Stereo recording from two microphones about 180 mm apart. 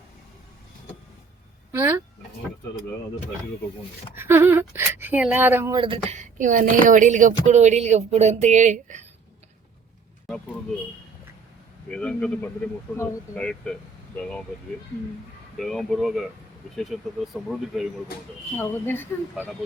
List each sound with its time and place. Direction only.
1.7 s speech: 10° right (ahead or behind)
4.1 s speech: 10° right (ahead or behind)
5.7 s speech: 30° right (ahead or behind)
6.1 s speech: 45° right (ahead or behind)
11.9 s speech: 5° left (ahead or behind)
15.5 s speech: centre (ahead or behind)
18.5 s speech: 10° left (ahead or behind)